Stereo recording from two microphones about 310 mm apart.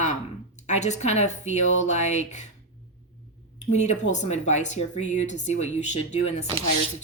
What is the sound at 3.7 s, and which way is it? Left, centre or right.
Speech, left.